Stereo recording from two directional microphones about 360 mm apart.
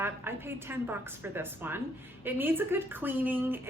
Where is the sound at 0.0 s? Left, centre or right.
Centre.